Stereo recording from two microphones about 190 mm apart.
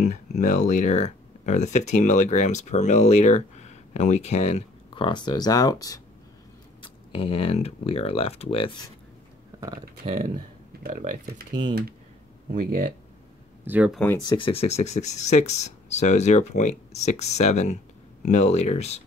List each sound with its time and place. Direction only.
0.0 s speech: 40° left (ahead or behind)
9.6 s speech: 20° right (ahead or behind)
10.0 s speech: 35° right (ahead or behind)
12.5 s speech: 50° right (ahead or behind)
13.7 s speech: 10° right (ahead or behind)
13.9 s speech: 15° left (ahead or behind); by 19.0 s 35° left (ahead or behind)